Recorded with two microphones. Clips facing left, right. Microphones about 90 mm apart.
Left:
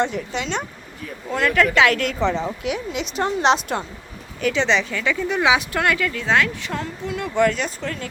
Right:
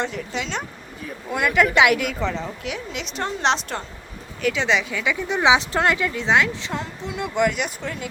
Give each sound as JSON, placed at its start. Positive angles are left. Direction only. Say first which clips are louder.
{"t": 0.0, "sound": "a woman's voice", "louder": "left 4 dB", "side_deg": 0}
{"t": 1.3, "sound": "a woman's voice", "louder": "left 1 dB", "side_deg": -15}